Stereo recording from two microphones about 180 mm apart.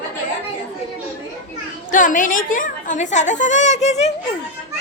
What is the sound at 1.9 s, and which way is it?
A woman's voice, 45° left (ahead or behind).